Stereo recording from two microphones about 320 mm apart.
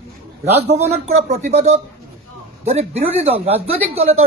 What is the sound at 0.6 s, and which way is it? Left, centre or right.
Speech, right.